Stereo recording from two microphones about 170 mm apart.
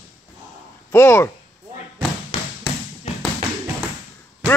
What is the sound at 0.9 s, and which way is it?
Speech, 15° left (ahead or behind).